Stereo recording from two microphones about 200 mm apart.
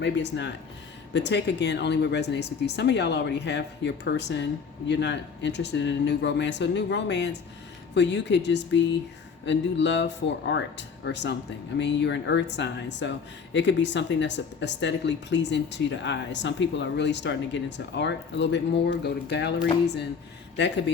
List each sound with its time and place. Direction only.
0.0 s speech: 60° left (ahead or behind)